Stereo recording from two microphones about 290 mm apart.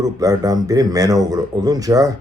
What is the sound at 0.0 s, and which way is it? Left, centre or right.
Speech, centre.